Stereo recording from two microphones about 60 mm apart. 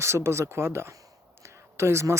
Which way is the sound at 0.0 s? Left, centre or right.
Right.